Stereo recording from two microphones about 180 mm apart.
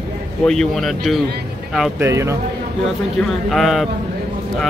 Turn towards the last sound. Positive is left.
turn(degrees=0)  # may be behind; listen again after turning